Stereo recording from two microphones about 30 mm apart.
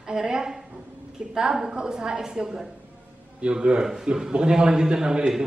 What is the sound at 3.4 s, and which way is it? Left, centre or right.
A man's voice, right.